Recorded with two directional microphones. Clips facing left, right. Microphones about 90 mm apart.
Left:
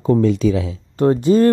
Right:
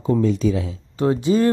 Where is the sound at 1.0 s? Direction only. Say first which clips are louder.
Left 4 dB; 45° left (ahead or behind).